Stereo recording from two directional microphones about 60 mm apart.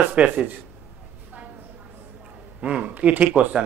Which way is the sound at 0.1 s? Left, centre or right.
Right.